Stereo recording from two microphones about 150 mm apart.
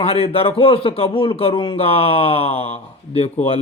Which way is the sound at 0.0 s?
40° left (ahead or behind).